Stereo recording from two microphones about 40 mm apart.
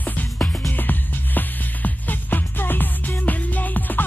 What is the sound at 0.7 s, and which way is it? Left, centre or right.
Music, left.